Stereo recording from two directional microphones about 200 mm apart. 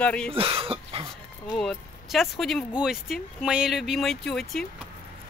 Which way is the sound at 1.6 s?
Centre (ahead or behind).